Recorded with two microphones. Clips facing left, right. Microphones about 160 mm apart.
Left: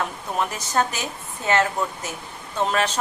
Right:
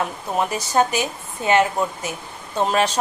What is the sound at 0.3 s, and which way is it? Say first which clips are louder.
Speech: right 4 dB; 15° right (ahead or behind).